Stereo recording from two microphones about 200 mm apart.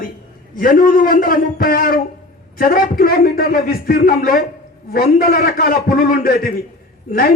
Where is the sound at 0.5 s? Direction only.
45° left (ahead or behind).